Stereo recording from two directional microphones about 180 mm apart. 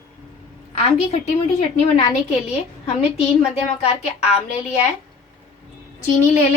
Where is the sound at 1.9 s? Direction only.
35° left (ahead or behind).